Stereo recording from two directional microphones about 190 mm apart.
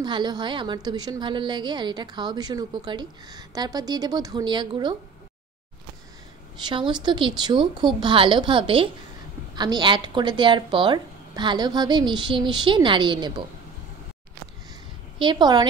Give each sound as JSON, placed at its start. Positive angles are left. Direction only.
{"t": 0.0, "sound": "a woman's voice", "side_deg": -25}
{"t": 6.6, "sound": "a woman's voice", "side_deg": -25}
{"t": 15.1, "sound": "a woman's voice", "side_deg": -25}